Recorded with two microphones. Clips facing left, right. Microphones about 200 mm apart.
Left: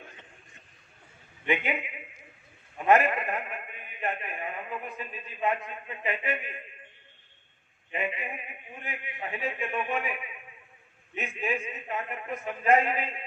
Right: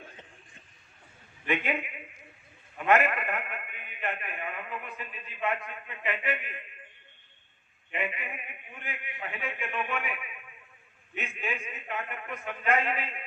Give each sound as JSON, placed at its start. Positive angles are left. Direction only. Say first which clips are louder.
{"t": 2.7, "sound": "a man's voice", "louder": "left 2 dB", "side_deg": 30}
{"t": 7.9, "sound": "a man's voice", "louder": "left 2 dB", "side_deg": 30}